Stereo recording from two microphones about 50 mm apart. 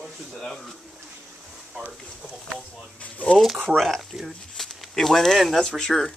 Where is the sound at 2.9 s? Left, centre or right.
Left.